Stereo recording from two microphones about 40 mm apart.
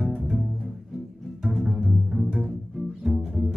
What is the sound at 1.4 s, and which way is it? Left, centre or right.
Double bass, centre.